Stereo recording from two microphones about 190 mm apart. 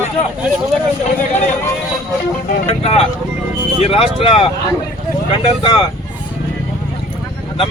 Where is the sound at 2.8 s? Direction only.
30° left (ahead or behind).